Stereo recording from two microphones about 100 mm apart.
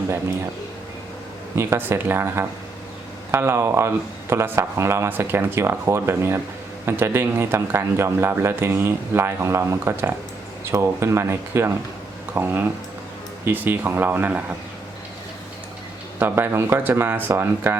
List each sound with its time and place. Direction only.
1.5 s speech: 25° right (ahead or behind)
16.1 s speech: 20° right (ahead or behind)